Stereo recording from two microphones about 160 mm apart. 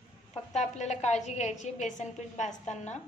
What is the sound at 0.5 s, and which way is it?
A woman's voice, 45° left (ahead or behind).